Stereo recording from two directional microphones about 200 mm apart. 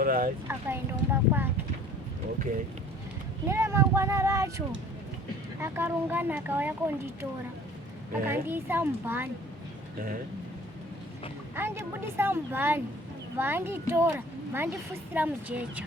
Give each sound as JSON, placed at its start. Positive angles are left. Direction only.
{"t": 0.0, "sound": "speech", "side_deg": -45}
{"t": 0.4, "sound": "speech", "side_deg": -10}
{"t": 3.4, "sound": "speech", "side_deg": -15}
{"t": 8.3, "sound": "speech", "side_deg": -10}
{"t": 11.5, "sound": "speech", "side_deg": -10}